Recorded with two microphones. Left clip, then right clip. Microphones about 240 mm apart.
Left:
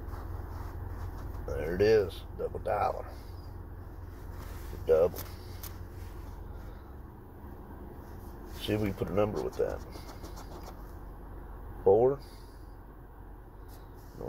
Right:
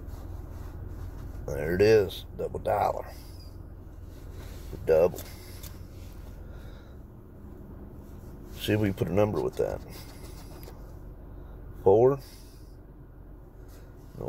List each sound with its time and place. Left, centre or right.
1.6 s speech: right
4.8 s speech: right
8.6 s speech: right
11.8 s speech: right